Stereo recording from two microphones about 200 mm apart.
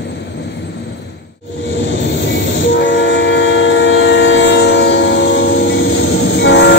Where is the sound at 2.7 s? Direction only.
65° left (ahead or behind).